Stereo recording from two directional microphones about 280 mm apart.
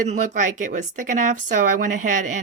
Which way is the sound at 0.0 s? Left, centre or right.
Right.